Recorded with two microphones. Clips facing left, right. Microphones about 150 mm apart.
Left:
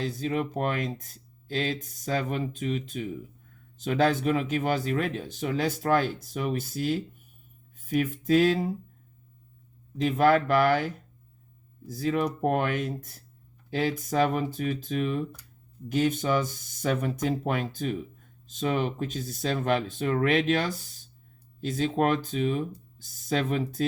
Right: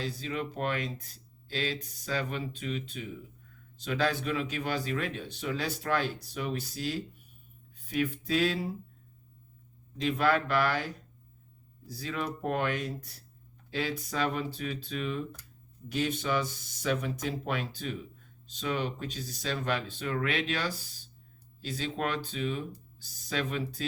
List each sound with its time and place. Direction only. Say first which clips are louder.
0.0 s speech: left 6 dB; 45° left (ahead or behind)
10.0 s speech: left 6 dB; 45° left (ahead or behind)
21.7 s speech: left 8 dB; 45° left (ahead or behind)